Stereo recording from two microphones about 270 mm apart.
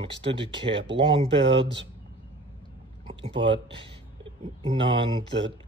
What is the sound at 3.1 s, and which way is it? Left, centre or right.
Speech, centre.